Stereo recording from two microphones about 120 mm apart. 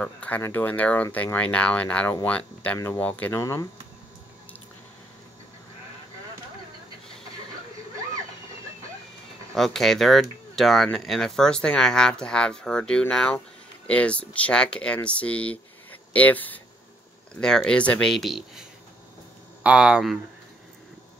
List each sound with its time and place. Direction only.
0.0 s speech: 15° left (ahead or behind)
9.5 s speech: 5° left (ahead or behind)